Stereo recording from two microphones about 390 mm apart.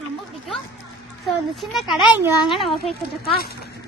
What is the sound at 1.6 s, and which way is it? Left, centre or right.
Speech, centre.